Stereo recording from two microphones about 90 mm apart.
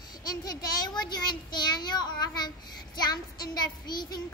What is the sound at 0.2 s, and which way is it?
A child's voice, 45° left (ahead or behind).